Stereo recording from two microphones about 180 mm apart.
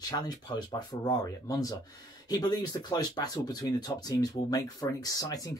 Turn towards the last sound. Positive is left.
turn(degrees=20)  # may be behind; listen again after turning